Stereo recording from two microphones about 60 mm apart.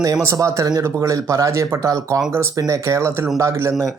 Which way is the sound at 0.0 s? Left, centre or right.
Right.